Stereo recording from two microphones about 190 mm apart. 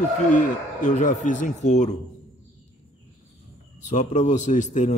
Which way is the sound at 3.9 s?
40° left (ahead or behind).